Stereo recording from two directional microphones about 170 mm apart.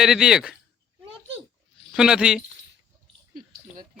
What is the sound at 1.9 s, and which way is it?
Speech, 5° right (ahead or behind).